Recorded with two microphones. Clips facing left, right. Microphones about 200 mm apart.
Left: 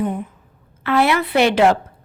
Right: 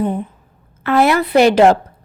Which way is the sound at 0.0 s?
35° right (ahead or behind).